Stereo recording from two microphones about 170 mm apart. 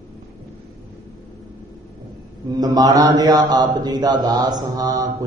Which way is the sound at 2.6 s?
20° right (ahead or behind).